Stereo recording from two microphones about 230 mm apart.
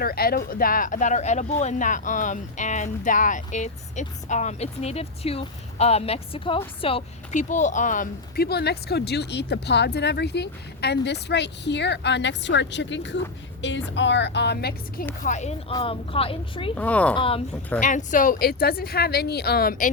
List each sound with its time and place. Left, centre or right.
0.0 s a woman's voice: left
15.2 s a woman's voice: left
16.7 s speech: centre
17.2 s a woman's voice: left
17.7 s speech: left